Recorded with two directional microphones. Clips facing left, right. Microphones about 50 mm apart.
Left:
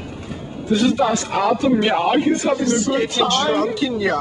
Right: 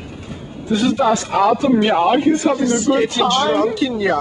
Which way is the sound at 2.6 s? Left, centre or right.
Centre.